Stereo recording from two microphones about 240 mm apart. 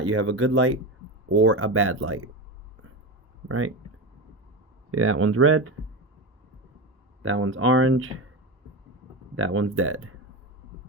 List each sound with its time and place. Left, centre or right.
0.0 s speech: right
4.9 s speech: right
7.2 s speech: right
9.3 s speech: right